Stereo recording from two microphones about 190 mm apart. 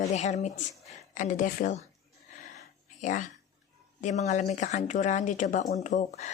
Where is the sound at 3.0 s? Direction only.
40° left (ahead or behind).